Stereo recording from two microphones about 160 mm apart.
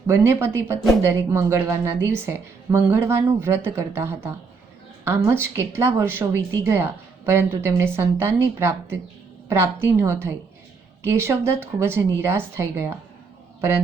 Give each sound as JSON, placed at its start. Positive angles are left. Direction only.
{"t": 0.1, "sound": "a woman's voice", "side_deg": -15}